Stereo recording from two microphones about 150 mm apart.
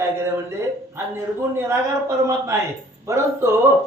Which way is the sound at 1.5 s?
20° right (ahead or behind).